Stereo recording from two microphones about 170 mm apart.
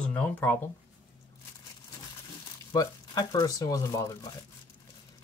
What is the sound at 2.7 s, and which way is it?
Speech, 20° left (ahead or behind).